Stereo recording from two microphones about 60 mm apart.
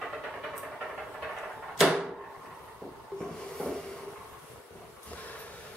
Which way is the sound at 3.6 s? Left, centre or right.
Centre.